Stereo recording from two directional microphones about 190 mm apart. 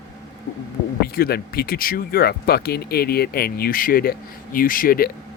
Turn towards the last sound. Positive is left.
turn(degrees=50)  # may be behind; listen again after turning